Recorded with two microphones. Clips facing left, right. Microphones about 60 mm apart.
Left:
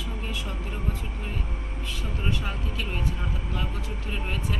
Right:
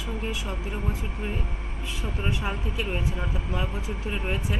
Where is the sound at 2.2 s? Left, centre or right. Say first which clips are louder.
Right 2 dB; centre.